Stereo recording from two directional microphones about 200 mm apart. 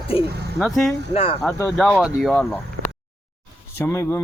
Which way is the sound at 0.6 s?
Centre (ahead or behind).